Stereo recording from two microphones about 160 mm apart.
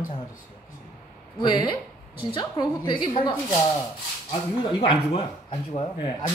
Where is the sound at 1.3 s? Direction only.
30° left (ahead or behind).